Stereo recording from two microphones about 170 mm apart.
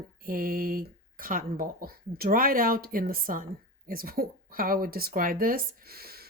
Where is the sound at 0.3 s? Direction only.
60° right (ahead or behind).